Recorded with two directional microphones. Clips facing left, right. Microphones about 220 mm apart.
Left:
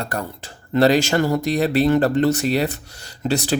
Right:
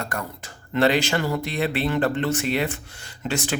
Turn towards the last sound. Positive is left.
turn(degrees=35)  # may be behind; listen again after turning